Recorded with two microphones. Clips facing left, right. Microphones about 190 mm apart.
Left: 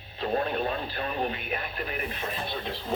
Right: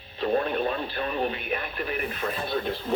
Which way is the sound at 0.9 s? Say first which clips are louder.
Right 2 dB; 40° left (ahead or behind).